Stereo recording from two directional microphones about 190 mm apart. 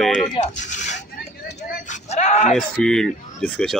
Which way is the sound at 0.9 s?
65° left (ahead or behind).